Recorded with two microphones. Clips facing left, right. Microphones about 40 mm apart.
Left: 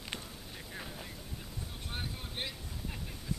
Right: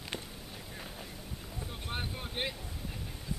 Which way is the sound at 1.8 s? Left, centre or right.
Centre.